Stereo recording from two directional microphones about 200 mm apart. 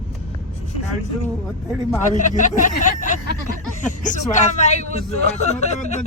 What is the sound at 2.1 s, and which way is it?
A man's voice, 40° left (ahead or behind).